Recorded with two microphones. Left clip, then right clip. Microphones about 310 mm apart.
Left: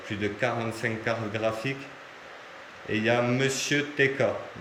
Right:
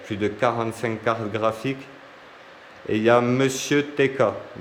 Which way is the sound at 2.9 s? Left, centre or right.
Centre.